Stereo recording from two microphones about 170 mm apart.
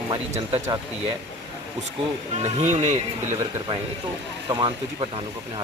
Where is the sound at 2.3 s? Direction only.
40° right (ahead or behind).